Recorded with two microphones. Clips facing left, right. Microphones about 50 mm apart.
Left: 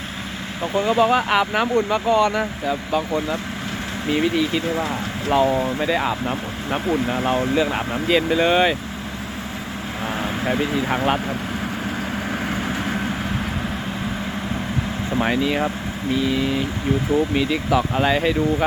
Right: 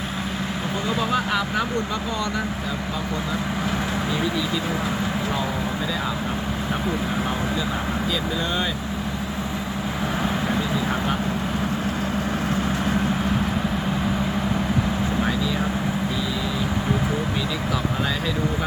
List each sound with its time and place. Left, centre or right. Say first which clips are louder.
0.9 s speech: left 6 dB; left
4.1 s speech: left 9 dB; left
7.3 s speech: left 6 dB; left
15.2 s speech: left 8 dB; left